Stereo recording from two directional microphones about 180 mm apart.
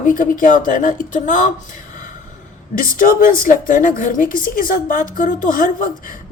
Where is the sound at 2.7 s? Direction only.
50° left (ahead or behind).